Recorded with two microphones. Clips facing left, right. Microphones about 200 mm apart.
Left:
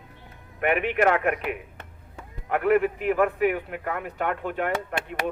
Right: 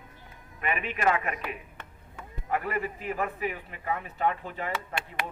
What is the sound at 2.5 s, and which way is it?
A man's voice, 65° left (ahead or behind).